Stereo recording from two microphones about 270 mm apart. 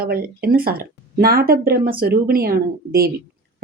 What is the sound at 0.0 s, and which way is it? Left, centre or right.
Speech, right.